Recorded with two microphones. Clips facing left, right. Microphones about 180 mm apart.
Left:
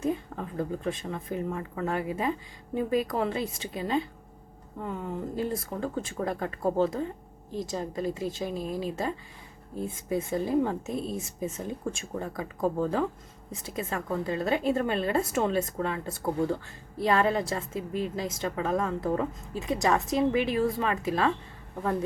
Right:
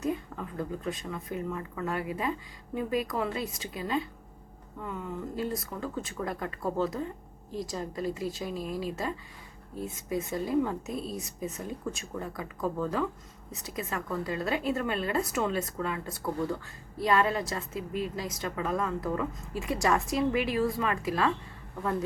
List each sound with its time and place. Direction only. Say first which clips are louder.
0.0 s a woman's voice: left 2 dB; 25° left (ahead or behind)
9.8 s a woman's voice: left 3 dB; 30° left (ahead or behind)